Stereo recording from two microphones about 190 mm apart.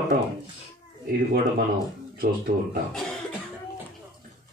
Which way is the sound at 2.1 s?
50° right (ahead or behind).